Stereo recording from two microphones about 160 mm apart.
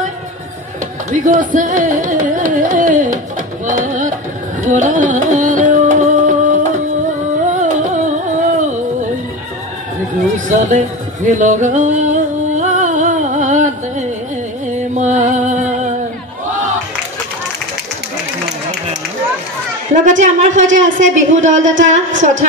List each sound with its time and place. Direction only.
1.1 s carnatic music: 55° right (ahead or behind)
3.6 s music: 50° right (ahead or behind)
4.6 s carnatic music: 50° right (ahead or behind)
10.3 s a sound: 50° right (ahead or behind)
11.2 s music: 50° right (ahead or behind)
19.9 s a woman's voice: 50° right (ahead or behind)